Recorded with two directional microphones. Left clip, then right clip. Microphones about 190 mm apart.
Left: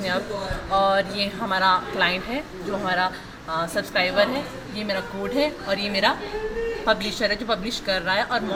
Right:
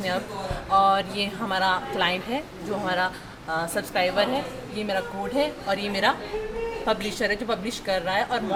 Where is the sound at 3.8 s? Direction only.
20° right (ahead or behind).